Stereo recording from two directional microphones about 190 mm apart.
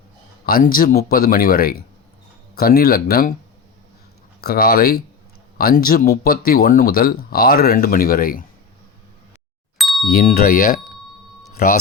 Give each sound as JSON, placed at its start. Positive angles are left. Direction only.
{"t": 0.4, "sound": "speech", "side_deg": 50}
{"t": 4.4, "sound": "speech", "side_deg": 50}
{"t": 9.7, "sound": "ding", "side_deg": 0}
{"t": 10.1, "sound": "speech", "side_deg": 50}